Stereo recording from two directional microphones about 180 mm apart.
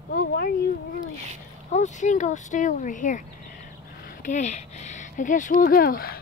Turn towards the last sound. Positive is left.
turn(degrees=55)  # may be behind; listen again after turning